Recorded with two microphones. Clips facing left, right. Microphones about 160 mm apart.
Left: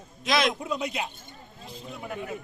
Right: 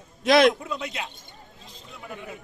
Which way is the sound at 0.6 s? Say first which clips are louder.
Left 2 dB; 15° left (ahead or behind).